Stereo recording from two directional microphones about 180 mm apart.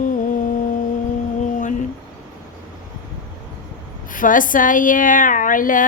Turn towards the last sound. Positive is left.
turn(degrees=50)  # may be behind; listen again after turning